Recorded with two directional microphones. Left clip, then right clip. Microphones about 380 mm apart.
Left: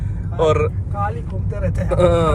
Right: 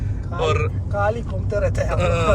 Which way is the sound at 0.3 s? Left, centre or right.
Centre.